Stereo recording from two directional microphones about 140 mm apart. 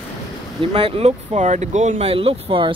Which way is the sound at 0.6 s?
40° right (ahead or behind).